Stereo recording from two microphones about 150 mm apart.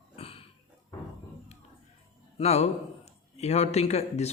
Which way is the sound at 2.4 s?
45° left (ahead or behind).